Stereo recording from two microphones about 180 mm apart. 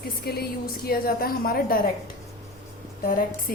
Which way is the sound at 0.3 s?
60° left (ahead or behind).